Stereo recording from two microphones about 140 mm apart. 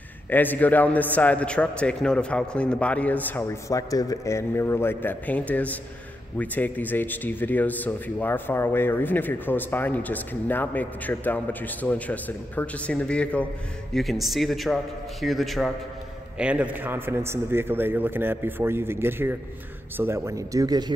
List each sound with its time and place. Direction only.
0.3 s a man's voice: 15° left (ahead or behind); by 20.9 s 30° right (ahead or behind)